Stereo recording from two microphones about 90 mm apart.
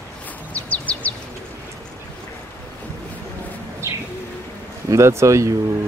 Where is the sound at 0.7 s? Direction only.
15° left (ahead or behind).